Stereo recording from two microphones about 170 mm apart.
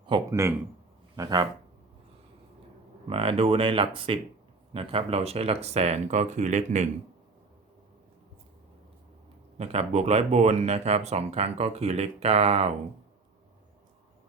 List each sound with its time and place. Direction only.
0.3 s speech: 15° right (ahead or behind)
3.1 s speech: 35° right (ahead or behind)
9.6 s speech: 40° right (ahead or behind)